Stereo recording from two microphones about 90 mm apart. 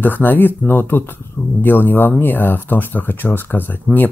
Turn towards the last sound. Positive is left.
turn(degrees=20)  # may be behind; listen again after turning